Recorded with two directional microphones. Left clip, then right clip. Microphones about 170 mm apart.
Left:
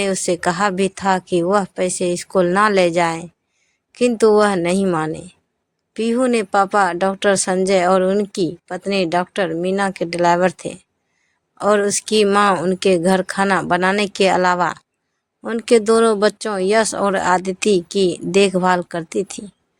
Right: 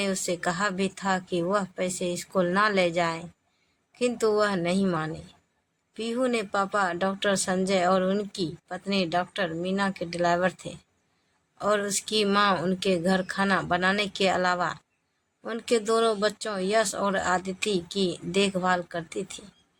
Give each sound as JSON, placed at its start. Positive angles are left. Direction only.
{"t": 0.0, "sound": "a woman's voice", "side_deg": 50}